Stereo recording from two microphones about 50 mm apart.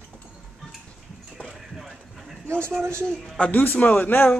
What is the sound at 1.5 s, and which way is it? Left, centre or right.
Clip-clop, centre.